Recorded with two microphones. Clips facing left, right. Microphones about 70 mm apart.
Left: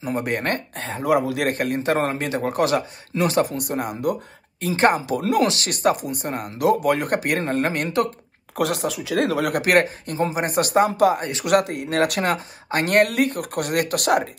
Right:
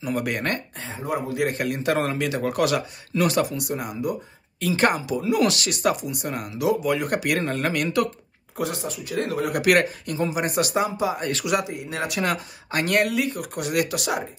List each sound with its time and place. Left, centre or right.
0.0 s a man's voice: left
0.7 s speech: left
1.5 s a man's voice: left
4.6 s a man's voice: left
5.1 s speech: left
5.4 s a man's voice: left
8.5 s speech: left
9.5 s a man's voice: left
12.2 s speech: left